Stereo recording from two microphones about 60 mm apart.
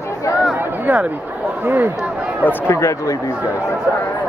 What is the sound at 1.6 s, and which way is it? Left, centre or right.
Speech, right.